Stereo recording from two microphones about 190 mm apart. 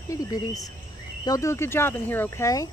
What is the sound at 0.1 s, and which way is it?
Speech, 20° left (ahead or behind).